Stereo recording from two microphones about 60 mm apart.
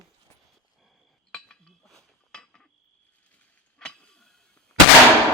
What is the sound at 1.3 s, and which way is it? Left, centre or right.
Cutlery, centre.